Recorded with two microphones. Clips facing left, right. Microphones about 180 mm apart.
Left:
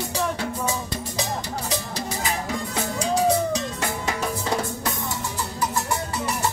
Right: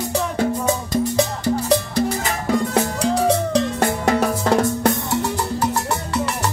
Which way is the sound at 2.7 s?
60° right (ahead or behind).